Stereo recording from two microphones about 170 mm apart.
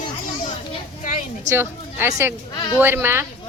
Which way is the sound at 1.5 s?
15° right (ahead or behind).